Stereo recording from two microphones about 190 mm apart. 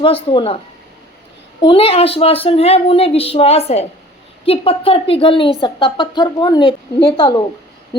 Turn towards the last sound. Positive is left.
turn(degrees=25)  # may be behind; listen again after turning